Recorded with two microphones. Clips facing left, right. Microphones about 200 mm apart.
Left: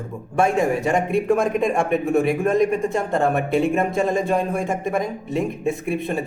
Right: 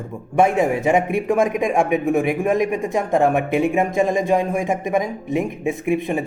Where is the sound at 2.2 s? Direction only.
20° right (ahead or behind).